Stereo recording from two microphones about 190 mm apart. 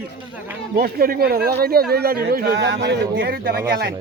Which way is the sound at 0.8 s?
50° right (ahead or behind).